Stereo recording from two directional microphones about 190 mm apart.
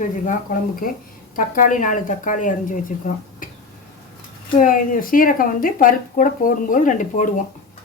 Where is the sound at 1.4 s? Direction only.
45° left (ahead or behind).